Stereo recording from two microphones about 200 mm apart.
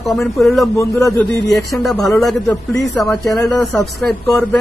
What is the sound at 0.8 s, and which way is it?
Speech, 15° left (ahead or behind).